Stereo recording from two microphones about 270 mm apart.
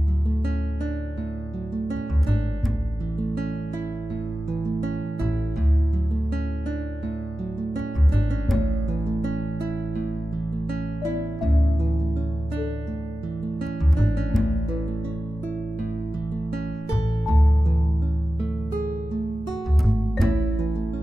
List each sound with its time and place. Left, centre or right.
8.5 s music: centre
13.9 s music: centre
19.9 s music: centre